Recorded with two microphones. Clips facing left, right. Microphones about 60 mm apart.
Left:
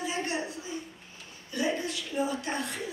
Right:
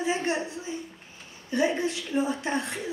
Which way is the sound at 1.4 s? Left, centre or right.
Right.